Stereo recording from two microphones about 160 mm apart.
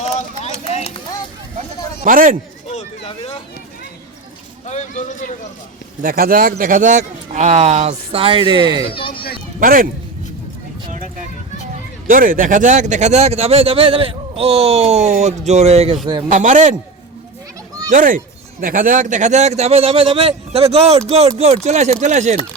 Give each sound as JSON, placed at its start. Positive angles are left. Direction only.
{"t": 0.0, "sound": "run", "side_deg": 40}
{"t": 2.0, "sound": "a man's voice", "side_deg": -60}
{"t": 2.6, "sound": "a sound", "side_deg": 40}
{"t": 4.6, "sound": "a sound", "side_deg": 45}
{"t": 6.0, "sound": "speech", "side_deg": -65}
{"t": 8.9, "sound": "a child's voice", "side_deg": 35}
{"t": 9.1, "sound": "a sound", "side_deg": 70}
{"t": 9.6, "sound": "a man's voice", "side_deg": -60}
{"t": 12.0, "sound": "speech", "side_deg": -55}
{"t": 16.3, "sound": "speech", "side_deg": -50}
{"t": 17.9, "sound": "a man's voice", "side_deg": -55}